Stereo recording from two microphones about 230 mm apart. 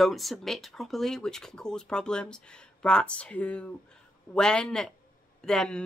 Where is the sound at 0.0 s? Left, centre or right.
Centre.